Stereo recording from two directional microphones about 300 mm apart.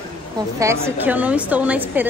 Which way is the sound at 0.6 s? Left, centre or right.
Centre.